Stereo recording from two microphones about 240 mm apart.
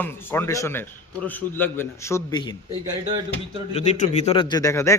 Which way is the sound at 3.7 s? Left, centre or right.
Left.